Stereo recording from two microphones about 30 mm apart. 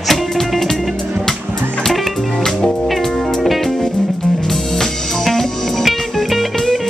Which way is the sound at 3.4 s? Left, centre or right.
Centre.